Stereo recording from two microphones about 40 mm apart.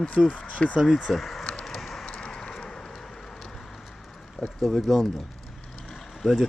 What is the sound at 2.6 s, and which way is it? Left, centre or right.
Vehicle, centre.